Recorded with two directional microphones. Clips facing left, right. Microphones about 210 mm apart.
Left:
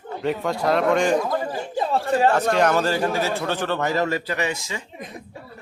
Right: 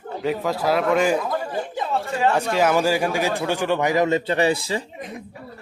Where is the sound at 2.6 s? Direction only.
10° right (ahead or behind); by 4.9 s 35° right (ahead or behind).